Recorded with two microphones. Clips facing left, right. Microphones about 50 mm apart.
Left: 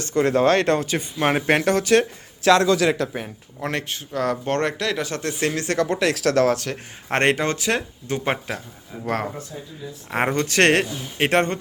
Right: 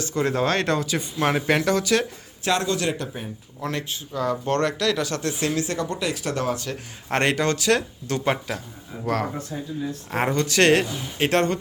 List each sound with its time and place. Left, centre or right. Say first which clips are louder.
0.0 s speech: left 5 dB; left
2.4 s speech: left 7 dB; left
3.6 s speech: left 2 dB; left
4.4 s speech: even; left
5.7 s speech: left 5 dB; left
6.7 s speech: left 2 dB; left
8.3 s speech: right 2 dB; left